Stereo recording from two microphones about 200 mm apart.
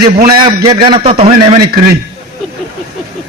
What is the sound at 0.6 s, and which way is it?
A man's voice, 20° right (ahead or behind).